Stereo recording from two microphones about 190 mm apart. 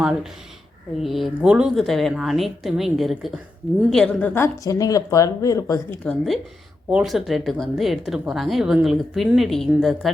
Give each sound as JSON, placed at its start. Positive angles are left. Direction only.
{"t": 0.0, "sound": "speech", "side_deg": -5}
{"t": 6.1, "sound": "speech", "side_deg": 0}